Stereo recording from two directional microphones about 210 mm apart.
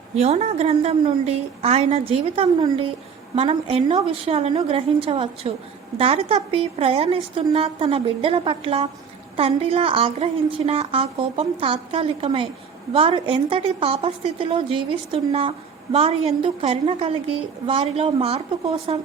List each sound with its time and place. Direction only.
0.2 s a woman's voice: 30° right (ahead or behind)